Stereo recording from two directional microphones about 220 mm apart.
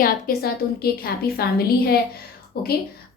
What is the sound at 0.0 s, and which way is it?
A woman's voice, 40° left (ahead or behind).